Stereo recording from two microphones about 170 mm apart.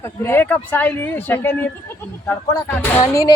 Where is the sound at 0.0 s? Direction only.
15° left (ahead or behind).